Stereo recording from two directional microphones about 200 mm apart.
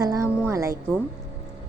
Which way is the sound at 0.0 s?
15° right (ahead or behind).